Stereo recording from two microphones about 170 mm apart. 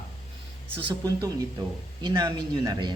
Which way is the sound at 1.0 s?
20° right (ahead or behind).